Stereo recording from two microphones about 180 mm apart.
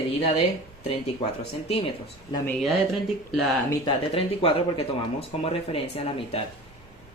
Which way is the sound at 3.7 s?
25° left (ahead or behind).